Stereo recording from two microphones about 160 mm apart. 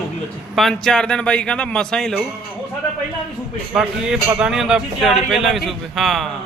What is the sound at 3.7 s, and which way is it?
Speech, 5° right (ahead or behind).